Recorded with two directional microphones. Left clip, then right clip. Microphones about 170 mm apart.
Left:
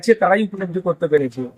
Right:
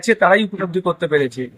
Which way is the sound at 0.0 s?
Centre (ahead or behind).